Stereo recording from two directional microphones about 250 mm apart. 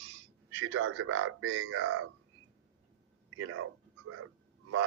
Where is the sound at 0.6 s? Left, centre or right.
Right.